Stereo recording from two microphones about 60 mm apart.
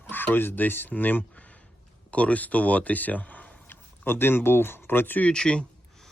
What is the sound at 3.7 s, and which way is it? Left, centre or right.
Speech, left.